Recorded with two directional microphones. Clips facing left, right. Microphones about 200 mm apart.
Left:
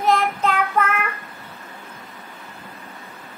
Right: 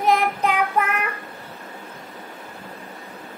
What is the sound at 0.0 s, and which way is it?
Child singing, 15° right (ahead or behind).